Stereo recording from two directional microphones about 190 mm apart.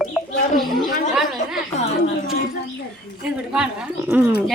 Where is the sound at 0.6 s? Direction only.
Centre (ahead or behind).